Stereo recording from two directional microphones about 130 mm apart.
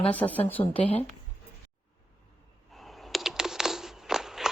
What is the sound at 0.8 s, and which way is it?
Speech, 50° left (ahead or behind).